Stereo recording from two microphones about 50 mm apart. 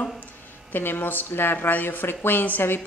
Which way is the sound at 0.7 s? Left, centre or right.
Left.